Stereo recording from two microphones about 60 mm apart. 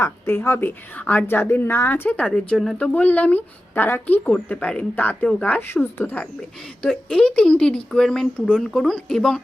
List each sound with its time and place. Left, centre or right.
0.0 s a woman's voice: left
0.9 s a woman's voice: left
2.0 s speech: left
2.7 s speech: left
5.3 s speech: centre
5.5 s a woman's voice: left
6.8 s speech: centre